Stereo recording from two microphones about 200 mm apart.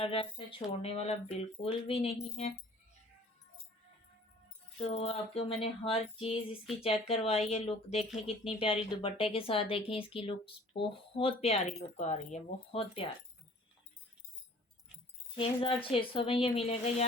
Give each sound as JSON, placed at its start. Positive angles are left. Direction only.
{"t": 0.0, "sound": "speech", "side_deg": 25}
{"t": 4.8, "sound": "speech", "side_deg": 30}
{"t": 15.4, "sound": "speech", "side_deg": 25}